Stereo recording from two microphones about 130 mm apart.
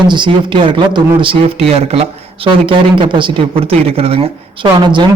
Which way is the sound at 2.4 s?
40° right (ahead or behind).